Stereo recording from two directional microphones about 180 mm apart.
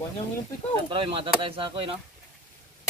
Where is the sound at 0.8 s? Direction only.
30° right (ahead or behind).